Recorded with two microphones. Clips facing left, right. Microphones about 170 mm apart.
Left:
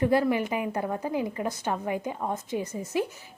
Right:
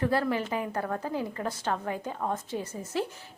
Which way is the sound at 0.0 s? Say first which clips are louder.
Left 4 dB; 15° left (ahead or behind).